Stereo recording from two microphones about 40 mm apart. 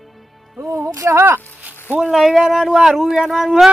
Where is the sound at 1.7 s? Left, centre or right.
Left.